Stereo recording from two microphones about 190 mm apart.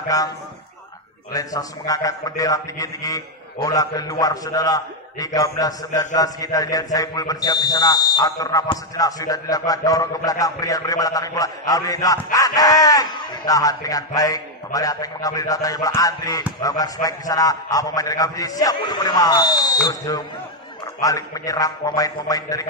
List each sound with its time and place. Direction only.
0.1 s a man's voice: 20° left (ahead or behind)
1.3 s a man's voice: 20° left (ahead or behind)